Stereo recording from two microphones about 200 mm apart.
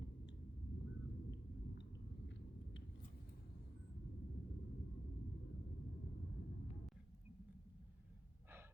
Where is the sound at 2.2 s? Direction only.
65° left (ahead or behind).